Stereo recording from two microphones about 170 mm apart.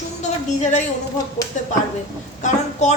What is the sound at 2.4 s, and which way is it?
Speech, 45° left (ahead or behind).